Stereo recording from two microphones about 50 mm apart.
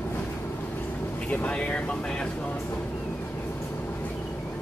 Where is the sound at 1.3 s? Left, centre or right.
Left.